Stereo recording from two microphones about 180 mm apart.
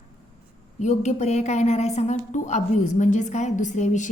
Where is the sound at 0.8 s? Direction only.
40° left (ahead or behind).